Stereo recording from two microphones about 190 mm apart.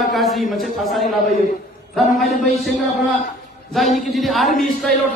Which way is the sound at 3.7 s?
Centre (ahead or behind).